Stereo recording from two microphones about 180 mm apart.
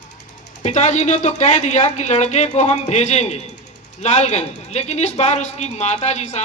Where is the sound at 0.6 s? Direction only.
40° left (ahead or behind).